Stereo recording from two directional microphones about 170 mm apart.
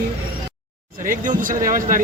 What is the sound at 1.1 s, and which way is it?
Speech, 50° right (ahead or behind).